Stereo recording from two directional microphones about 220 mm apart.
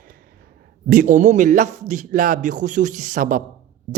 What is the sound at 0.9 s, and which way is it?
A man's voice, 40° right (ahead or behind).